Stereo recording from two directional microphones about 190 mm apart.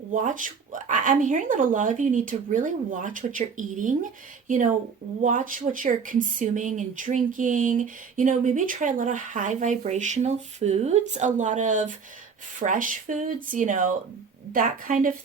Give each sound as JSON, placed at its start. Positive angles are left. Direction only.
{"t": 0.1, "sound": "speech", "side_deg": -45}